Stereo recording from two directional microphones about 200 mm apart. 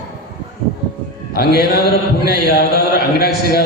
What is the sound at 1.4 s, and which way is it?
Mantra, 50° left (ahead or behind).